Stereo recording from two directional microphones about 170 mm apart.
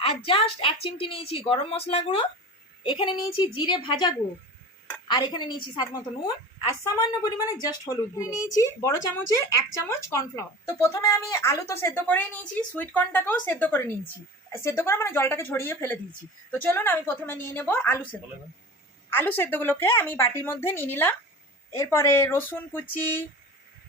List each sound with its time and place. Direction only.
0.3 s a woman's voice: 35° left (ahead or behind); by 18.0 s 15° left (ahead or behind)
19.1 s a woman's voice: 10° left (ahead or behind)